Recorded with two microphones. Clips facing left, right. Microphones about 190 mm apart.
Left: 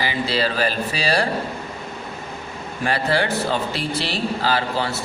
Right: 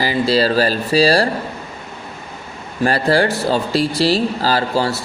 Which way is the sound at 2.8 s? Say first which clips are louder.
Right 6 dB; 40° right (ahead or behind).